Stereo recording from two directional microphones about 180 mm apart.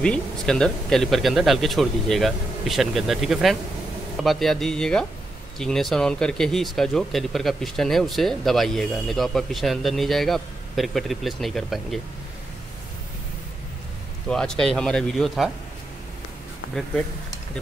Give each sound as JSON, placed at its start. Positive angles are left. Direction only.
{"t": 0.0, "sound": "speech", "side_deg": 5}
{"t": 14.3, "sound": "speech", "side_deg": 5}